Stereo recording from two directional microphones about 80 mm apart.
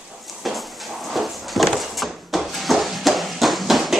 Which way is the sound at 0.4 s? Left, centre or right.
Centre.